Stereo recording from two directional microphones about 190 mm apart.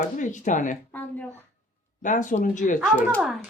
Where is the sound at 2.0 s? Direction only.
40° left (ahead or behind).